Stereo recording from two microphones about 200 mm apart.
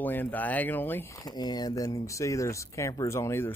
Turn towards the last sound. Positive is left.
turn(degrees=15)  # may be behind; listen again after turning